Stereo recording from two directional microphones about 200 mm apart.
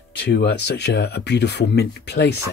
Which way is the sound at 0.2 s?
55° left (ahead or behind).